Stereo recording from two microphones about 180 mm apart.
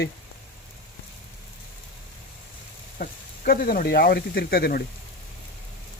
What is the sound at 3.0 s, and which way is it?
Speech, 55° left (ahead or behind).